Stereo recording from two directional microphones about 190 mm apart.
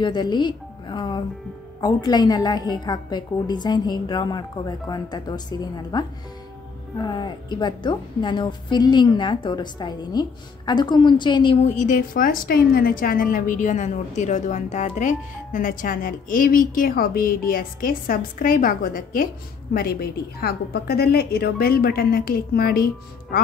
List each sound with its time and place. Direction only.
0.0 s a woman's voice: 25° left (ahead or behind)
11.6 s a woman's voice: 40° left (ahead or behind)